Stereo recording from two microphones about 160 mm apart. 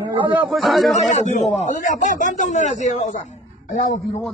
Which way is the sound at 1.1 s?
50° left (ahead or behind).